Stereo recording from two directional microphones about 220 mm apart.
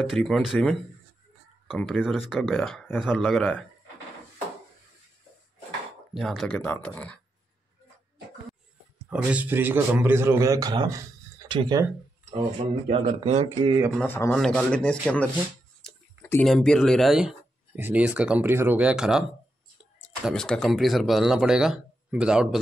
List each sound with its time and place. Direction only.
0.0 s speech: centre (ahead or behind)
6.1 s speech: centre (ahead or behind)
9.1 s a man's voice: 5° right (ahead or behind); by 13.7 s 30° right (ahead or behind)
13.9 s speech: 10° left (ahead or behind)
16.3 s speech: 5° left (ahead or behind)